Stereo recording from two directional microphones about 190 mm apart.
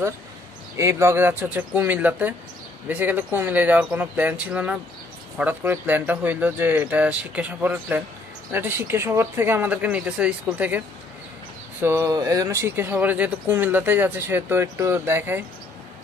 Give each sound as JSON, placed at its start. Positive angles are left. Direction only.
{"t": 0.7, "sound": "speech", "side_deg": -15}
{"t": 11.8, "sound": "speech", "side_deg": -15}